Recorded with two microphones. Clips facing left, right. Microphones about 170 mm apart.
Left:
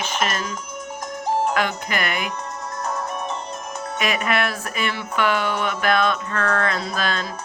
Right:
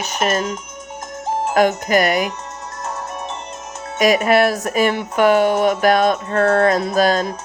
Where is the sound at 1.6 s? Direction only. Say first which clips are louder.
Right 9 dB; 40° right (ahead or behind).